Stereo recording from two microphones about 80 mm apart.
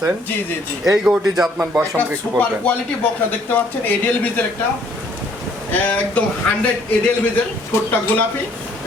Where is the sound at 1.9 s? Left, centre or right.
Left.